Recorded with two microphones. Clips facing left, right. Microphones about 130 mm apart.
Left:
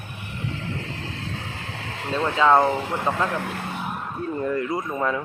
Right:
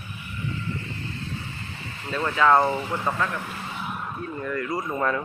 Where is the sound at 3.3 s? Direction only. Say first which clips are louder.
Left 5 dB; 70° left (ahead or behind).